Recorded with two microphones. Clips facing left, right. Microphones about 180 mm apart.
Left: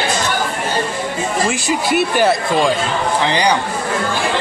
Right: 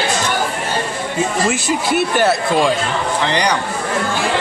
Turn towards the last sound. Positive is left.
turn(degrees=10)  # may be behind; listen again after turning